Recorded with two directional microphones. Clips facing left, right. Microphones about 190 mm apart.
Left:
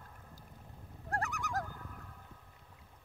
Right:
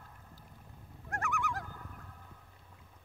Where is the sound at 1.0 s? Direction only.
35° left (ahead or behind).